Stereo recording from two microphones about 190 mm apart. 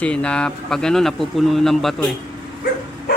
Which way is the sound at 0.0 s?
5° left (ahead or behind).